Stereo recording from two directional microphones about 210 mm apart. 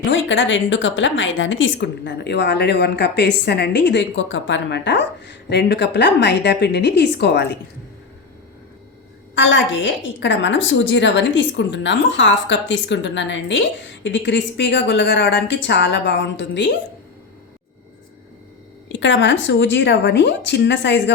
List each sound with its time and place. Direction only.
0.0 s a woman's voice: 60° left (ahead or behind)
9.3 s a woman's voice: 60° left (ahead or behind)
18.9 s a woman's voice: 60° left (ahead or behind)